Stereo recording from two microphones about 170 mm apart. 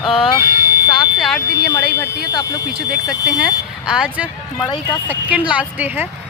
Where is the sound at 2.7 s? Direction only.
5° right (ahead or behind).